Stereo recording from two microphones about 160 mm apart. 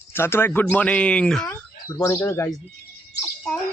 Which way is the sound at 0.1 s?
15° left (ahead or behind).